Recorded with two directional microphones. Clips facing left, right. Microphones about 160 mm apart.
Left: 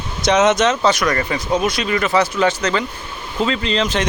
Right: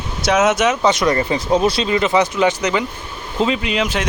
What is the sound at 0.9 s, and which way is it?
Speech, 25° right (ahead or behind).